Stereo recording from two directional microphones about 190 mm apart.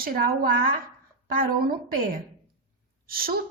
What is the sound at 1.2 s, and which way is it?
Speech, 50° right (ahead or behind).